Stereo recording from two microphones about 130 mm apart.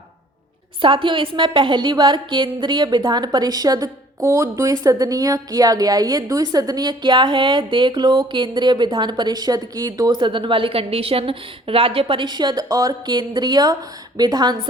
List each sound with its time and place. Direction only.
0.8 s a woman's voice: 40° right (ahead or behind)